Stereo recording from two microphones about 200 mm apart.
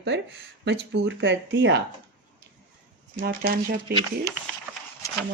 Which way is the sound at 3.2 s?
45° right (ahead or behind).